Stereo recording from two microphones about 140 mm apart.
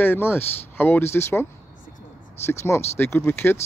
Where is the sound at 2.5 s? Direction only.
20° left (ahead or behind).